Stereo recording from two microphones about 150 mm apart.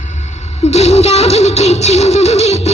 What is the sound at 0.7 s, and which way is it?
Music, 45° left (ahead or behind).